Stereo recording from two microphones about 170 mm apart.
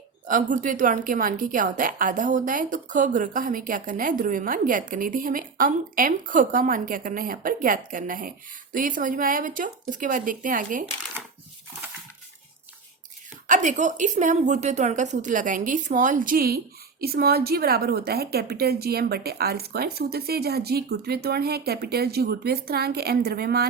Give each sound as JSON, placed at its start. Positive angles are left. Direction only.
{"t": 0.3, "sound": "a woman's voice", "side_deg": -50}
{"t": 13.5, "sound": "a woman's voice", "side_deg": -45}